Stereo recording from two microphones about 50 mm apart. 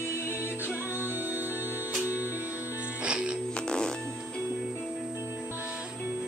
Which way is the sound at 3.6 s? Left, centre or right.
Centre.